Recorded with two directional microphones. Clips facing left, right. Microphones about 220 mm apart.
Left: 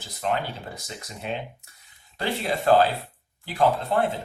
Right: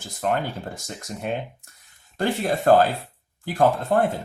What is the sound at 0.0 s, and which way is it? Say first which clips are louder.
Speech: right 3 dB; 50° right (ahead or behind).